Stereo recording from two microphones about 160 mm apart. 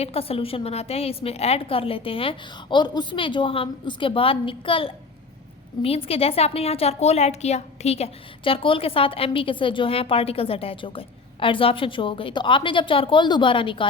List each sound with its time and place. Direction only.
0.0 s a woman's voice: 35° left (ahead or behind)